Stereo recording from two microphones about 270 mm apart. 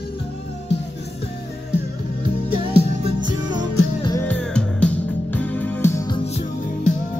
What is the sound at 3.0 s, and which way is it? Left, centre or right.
Music, centre.